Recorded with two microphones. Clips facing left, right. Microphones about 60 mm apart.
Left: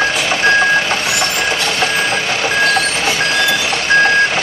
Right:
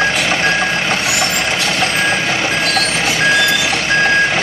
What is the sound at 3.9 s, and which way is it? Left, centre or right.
Vehicle, centre.